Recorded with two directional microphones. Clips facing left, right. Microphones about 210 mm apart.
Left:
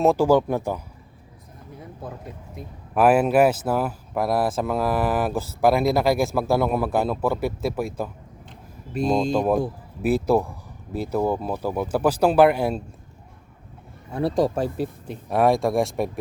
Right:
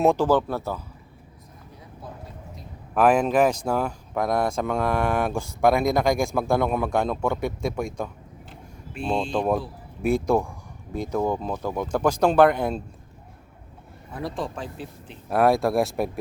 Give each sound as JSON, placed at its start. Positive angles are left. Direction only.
{"t": 0.0, "sound": "speech", "side_deg": 5}
{"t": 2.9, "sound": "speech", "side_deg": 5}
{"t": 8.9, "sound": "speech", "side_deg": 40}
{"t": 9.3, "sound": "speech", "side_deg": 5}
{"t": 14.1, "sound": "speech", "side_deg": 30}
{"t": 14.4, "sound": "speech", "side_deg": 40}
{"t": 15.3, "sound": "speech", "side_deg": 0}